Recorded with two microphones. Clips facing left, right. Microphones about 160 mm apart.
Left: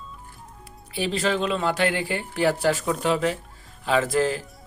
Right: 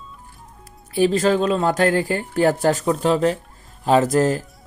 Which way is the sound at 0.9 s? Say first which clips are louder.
Right 7 dB; 45° right (ahead or behind).